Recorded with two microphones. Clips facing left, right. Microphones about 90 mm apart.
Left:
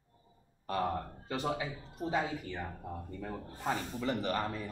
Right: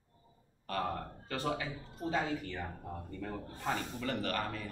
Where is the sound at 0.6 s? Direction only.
20° left (ahead or behind).